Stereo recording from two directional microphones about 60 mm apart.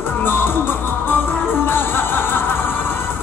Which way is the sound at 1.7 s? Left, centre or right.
Left.